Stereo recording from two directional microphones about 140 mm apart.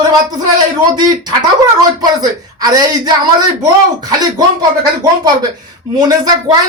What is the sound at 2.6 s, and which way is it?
Speech, 30° right (ahead or behind).